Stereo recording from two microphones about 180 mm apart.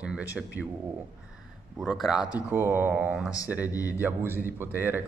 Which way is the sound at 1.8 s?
Centre (ahead or behind).